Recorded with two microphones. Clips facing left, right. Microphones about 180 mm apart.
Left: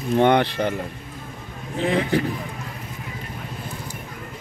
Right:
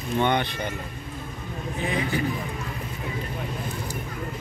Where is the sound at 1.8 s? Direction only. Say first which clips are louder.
Left 6 dB; 65° left (ahead or behind).